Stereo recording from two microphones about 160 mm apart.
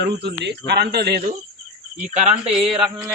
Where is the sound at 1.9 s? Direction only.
50° right (ahead or behind).